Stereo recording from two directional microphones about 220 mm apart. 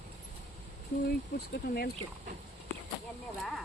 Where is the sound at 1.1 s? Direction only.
45° left (ahead or behind).